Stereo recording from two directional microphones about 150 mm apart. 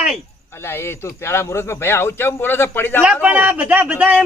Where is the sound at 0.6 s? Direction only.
15° left (ahead or behind).